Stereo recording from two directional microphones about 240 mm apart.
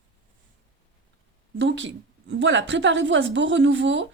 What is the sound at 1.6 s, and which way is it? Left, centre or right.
Speech, right.